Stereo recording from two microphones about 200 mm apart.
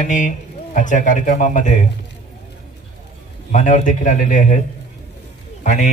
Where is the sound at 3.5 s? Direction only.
40° left (ahead or behind).